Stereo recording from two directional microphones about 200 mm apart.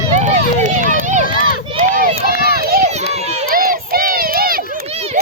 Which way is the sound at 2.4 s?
50° right (ahead or behind).